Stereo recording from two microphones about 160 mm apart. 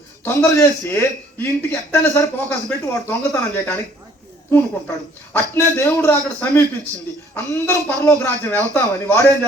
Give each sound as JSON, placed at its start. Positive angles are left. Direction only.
{"t": 0.3, "sound": "a man's voice", "side_deg": 15}
{"t": 5.3, "sound": "a man's voice", "side_deg": 15}